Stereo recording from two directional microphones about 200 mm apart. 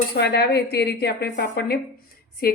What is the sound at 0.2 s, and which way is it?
A woman's voice, 55° left (ahead or behind).